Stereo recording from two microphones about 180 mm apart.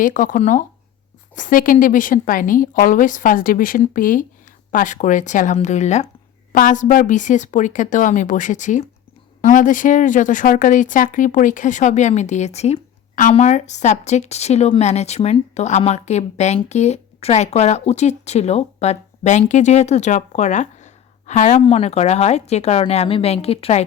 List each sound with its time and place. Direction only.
0.0 s speech: 45° left (ahead or behind)